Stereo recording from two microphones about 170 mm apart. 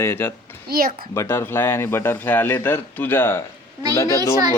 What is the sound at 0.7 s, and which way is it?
Speech, 60° right (ahead or behind).